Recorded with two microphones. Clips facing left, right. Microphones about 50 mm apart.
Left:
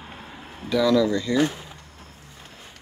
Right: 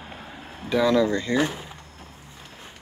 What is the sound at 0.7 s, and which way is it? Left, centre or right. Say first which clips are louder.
Speech: left 1 dB; right.